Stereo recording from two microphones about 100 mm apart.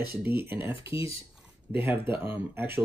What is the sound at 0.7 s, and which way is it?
Speech, 65° left (ahead or behind).